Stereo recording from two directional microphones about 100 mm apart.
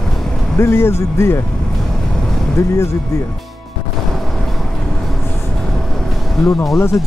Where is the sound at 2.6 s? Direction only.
30° left (ahead or behind).